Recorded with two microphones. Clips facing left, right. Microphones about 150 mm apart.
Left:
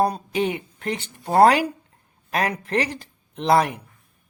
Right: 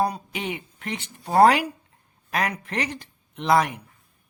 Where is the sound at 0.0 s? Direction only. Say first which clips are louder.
Left 5 dB; 35° left (ahead or behind).